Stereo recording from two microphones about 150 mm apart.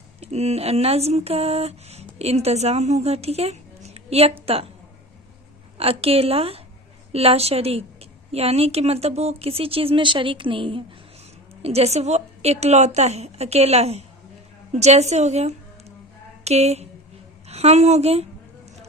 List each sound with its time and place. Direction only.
0.2 s speech: 45° right (ahead or behind)
5.7 s a woman's voice: 40° right (ahead or behind)